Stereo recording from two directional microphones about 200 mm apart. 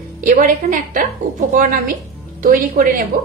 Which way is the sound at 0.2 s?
45° right (ahead or behind).